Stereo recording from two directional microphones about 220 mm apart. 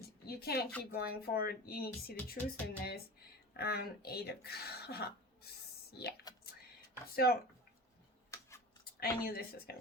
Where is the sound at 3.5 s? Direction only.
45° left (ahead or behind).